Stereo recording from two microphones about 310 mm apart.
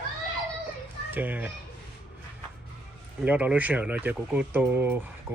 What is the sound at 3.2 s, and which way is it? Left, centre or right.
Speech, centre.